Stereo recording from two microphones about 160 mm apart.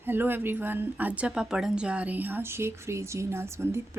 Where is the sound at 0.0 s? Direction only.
15° right (ahead or behind).